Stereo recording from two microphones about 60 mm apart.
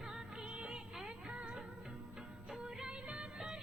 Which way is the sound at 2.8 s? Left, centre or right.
Centre.